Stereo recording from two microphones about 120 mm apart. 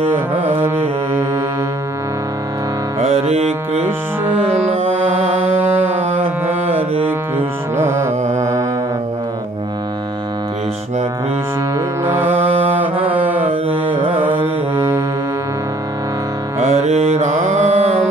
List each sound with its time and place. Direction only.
0.3 s music: 50° right (ahead or behind)
0.6 s music: 20° right (ahead or behind)
3.0 s music: 60° right (ahead or behind)
5.6 s music: 15° right (ahead or behind)
7.1 s music: 15° right (ahead or behind)
12.0 s music: 15° right (ahead or behind)
12.4 s mantra: 60° right (ahead or behind)
13.0 s mantra: 15° right (ahead or behind)
14.2 s music: 15° right (ahead or behind)
16.6 s mantra: 70° right (ahead or behind)